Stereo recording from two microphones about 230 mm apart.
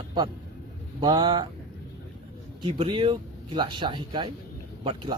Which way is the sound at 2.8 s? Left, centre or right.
Right.